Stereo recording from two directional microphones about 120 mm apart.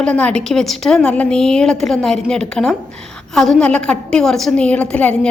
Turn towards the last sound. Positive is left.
turn(degrees=10)  # may be behind; listen again after turning